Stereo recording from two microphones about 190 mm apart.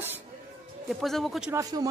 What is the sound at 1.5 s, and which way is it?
Speech, 20° right (ahead or behind).